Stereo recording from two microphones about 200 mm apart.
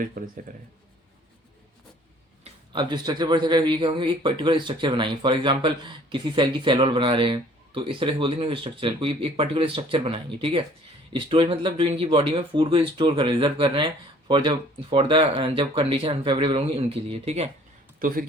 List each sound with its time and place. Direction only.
0.0 s a man's voice: 45° right (ahead or behind)
2.4 s speech: 20° right (ahead or behind)
18.0 s a man's voice: 45° right (ahead or behind)